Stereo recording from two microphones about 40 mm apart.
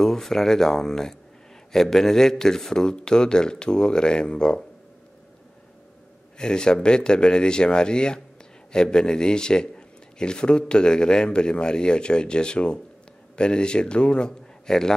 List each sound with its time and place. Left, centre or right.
0.0 s a man's voice: centre
6.3 s a man's voice: centre